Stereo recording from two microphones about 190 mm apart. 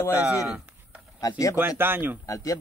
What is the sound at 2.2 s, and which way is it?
Speech, 20° left (ahead or behind).